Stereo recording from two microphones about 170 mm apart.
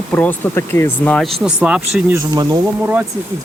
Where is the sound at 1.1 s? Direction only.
Centre (ahead or behind); by 2.6 s 20° right (ahead or behind).